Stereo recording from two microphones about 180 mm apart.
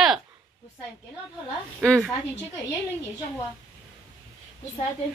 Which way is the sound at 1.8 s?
5° left (ahead or behind).